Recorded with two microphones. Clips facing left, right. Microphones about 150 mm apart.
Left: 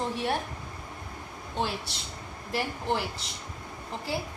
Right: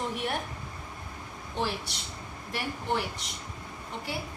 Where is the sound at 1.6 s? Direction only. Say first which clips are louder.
Left 1 dB; 30° left (ahead or behind).